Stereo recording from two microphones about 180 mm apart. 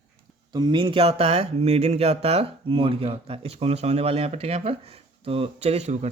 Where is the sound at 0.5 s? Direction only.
25° right (ahead or behind).